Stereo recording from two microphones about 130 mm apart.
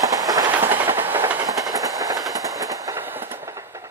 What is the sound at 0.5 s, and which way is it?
Train, 15° right (ahead or behind).